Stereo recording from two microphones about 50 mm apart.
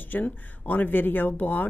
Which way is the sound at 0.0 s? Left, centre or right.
Left.